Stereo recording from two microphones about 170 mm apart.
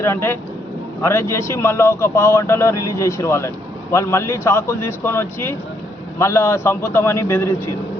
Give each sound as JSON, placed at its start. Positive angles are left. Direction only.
{"t": 0.0, "sound": "speech", "side_deg": 15}